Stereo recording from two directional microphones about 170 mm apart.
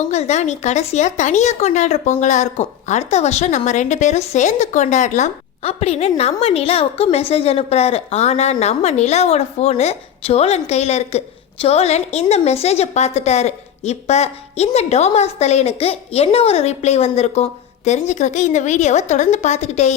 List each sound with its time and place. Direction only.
0.1 s a woman's voice: 40° left (ahead or behind)